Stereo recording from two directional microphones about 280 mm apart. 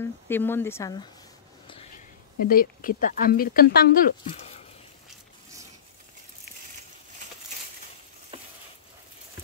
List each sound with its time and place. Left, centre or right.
0.3 s speech: centre
2.4 s speech: left
4.2 s a sound: left
8.3 s stir: centre